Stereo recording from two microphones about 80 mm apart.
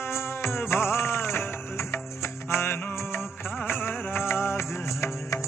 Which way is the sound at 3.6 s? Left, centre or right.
Left.